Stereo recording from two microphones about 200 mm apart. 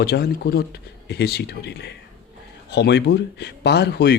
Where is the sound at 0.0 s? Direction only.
55° left (ahead or behind).